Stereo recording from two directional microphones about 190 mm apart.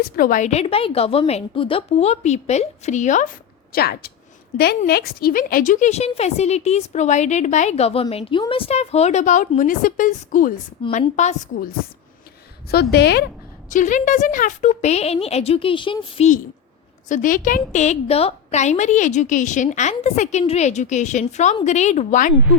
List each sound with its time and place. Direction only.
0.0 s a woman's voice: 50° left (ahead or behind)
3.7 s a woman's voice: 55° left (ahead or behind)
10.8 s a woman's voice: 25° left (ahead or behind)
11.2 s a woman's voice: 40° left (ahead or behind)
12.7 s a woman's voice: 60° left (ahead or behind)
13.7 s a woman's voice: 40° left (ahead or behind)